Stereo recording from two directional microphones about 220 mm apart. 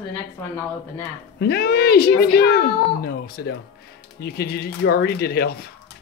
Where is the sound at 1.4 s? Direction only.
45° left (ahead or behind).